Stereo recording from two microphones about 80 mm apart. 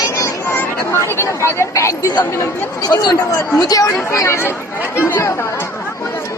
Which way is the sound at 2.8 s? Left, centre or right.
Left.